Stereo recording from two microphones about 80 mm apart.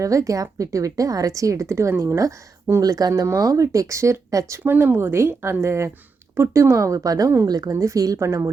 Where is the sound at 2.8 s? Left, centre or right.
Right.